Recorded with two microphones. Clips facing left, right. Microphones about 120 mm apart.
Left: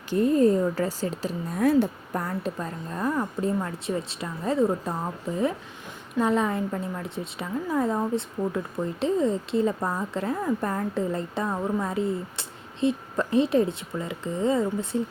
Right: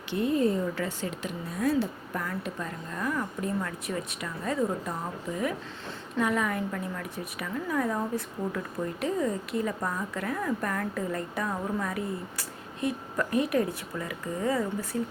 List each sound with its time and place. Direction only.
0.1 s speech: 40° left (ahead or behind)
1.5 s a woman's voice: 55° left (ahead or behind)
2.1 s a woman's voice: 35° left (ahead or behind)
6.1 s a woman's voice: 30° left (ahead or behind)